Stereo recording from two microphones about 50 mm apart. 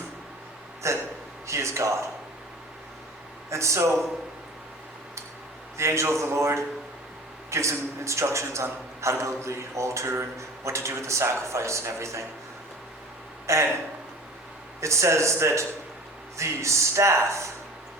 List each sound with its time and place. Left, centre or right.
0.8 s speech: right
1.5 s a man's voice: right
3.5 s a man's voice: right
5.7 s a man's voice: right
13.5 s a man's voice: right
14.8 s a man's voice: right